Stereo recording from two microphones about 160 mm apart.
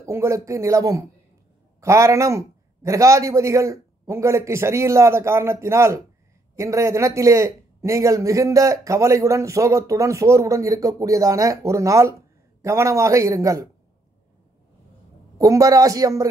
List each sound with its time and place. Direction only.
0.0 s speech: 20° right (ahead or behind)
15.3 s speech: 20° right (ahead or behind)